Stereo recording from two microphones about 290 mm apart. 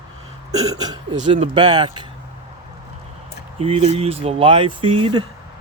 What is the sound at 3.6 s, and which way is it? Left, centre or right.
Speech, centre.